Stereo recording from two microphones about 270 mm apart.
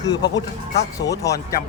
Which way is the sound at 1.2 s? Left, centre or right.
Centre.